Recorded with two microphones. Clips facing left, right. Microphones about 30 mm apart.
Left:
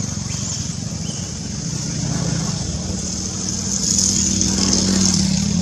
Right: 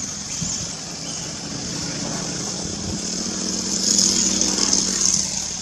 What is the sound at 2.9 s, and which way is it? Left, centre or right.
Vehicle, centre.